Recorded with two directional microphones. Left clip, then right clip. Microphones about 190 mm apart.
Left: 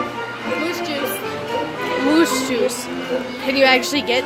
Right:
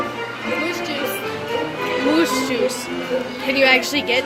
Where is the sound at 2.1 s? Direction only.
25° left (ahead or behind).